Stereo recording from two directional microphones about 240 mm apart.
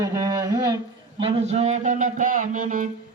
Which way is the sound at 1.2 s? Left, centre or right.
Right.